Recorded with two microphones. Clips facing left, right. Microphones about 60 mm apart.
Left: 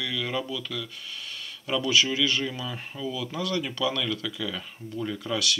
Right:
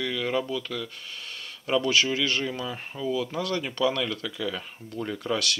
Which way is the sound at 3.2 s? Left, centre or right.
Right.